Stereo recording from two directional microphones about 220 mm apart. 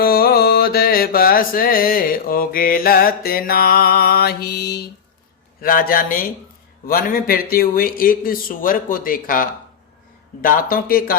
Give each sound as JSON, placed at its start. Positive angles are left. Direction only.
{"t": 0.0, "sound": "mantra", "side_deg": 45}
{"t": 5.6, "sound": "a man's voice", "side_deg": 40}